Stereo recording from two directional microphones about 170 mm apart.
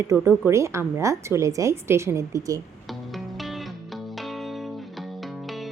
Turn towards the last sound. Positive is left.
turn(degrees=0)  # may be behind; listen again after turning